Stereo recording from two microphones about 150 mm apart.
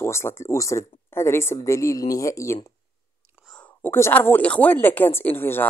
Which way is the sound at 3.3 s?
Centre (ahead or behind).